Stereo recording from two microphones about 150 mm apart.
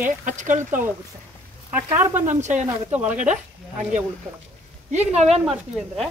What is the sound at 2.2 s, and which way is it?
Speech, 55° right (ahead or behind).